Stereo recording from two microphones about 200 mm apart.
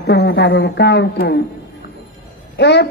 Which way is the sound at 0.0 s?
55° left (ahead or behind).